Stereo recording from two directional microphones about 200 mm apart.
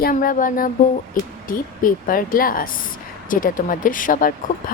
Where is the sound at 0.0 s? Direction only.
45° left (ahead or behind).